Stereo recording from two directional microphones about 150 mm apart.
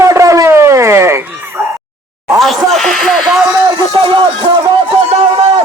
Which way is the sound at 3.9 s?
35° right (ahead or behind).